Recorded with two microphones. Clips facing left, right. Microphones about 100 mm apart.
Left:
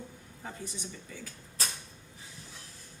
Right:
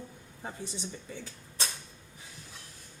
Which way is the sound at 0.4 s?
30° right (ahead or behind).